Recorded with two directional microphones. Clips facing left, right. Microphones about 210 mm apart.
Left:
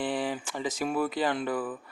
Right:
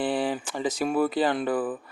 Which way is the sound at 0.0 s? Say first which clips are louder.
Right 4 dB; 35° right (ahead or behind).